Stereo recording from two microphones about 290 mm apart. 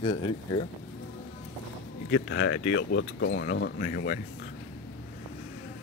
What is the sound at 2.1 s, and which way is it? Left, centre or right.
Speech, left.